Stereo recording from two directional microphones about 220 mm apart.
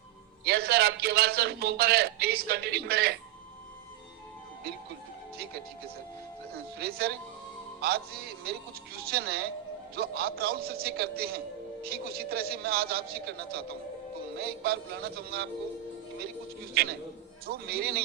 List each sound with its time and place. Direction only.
0.4 s a man's voice: 45° right (ahead or behind)
6.7 s a man's voice: 45° right (ahead or behind)
16.8 s a man's voice: 45° right (ahead or behind)